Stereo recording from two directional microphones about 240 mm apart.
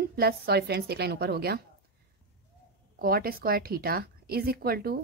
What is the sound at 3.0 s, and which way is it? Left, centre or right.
A woman's voice, right.